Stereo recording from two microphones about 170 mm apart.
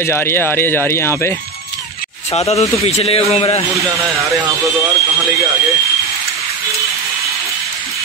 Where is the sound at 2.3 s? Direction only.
40° left (ahead or behind).